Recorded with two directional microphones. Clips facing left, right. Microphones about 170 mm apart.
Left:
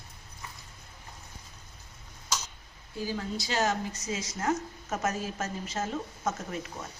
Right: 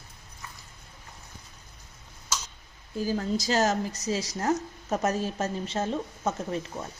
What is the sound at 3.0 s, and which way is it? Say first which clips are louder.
A woman's voice: right 6 dB; 40° right (ahead or behind).